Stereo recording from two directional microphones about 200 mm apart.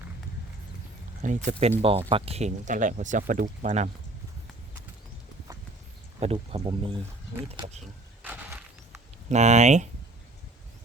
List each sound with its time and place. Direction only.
1.2 s speech: 40° right (ahead or behind)
6.1 s speech: 30° right (ahead or behind)
8.2 s mechanisms: 10° right (ahead or behind)
9.3 s speech: 35° right (ahead or behind)